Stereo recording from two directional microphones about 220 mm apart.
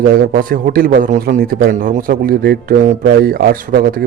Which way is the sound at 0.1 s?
40° right (ahead or behind).